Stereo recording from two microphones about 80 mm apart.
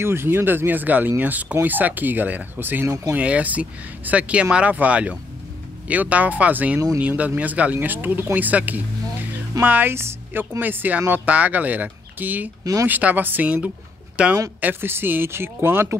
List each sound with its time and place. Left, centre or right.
0.0 s speech: right
3.2 s speech: centre
14.6 s speech: right